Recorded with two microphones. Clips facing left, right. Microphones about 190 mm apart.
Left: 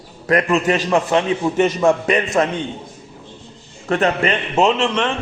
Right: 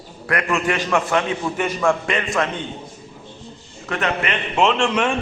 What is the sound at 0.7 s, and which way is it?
A man's voice, 30° left (ahead or behind).